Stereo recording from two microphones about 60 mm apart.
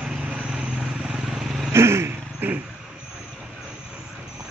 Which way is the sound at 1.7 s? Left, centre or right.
Right.